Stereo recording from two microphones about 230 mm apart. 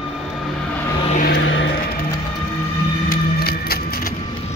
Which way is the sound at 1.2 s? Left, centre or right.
Left.